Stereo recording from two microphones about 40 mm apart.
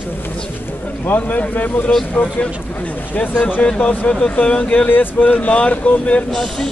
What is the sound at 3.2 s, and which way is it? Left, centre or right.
Speech, left.